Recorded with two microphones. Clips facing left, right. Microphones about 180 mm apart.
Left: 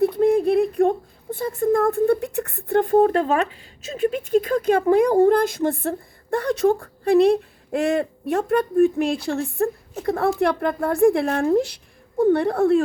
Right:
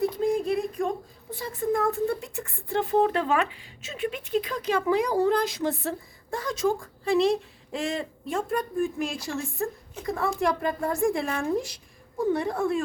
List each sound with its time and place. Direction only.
0.0 s speech: 60° left (ahead or behind)